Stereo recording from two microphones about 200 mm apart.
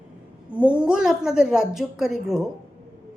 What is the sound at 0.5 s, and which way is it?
Speech, 5° right (ahead or behind).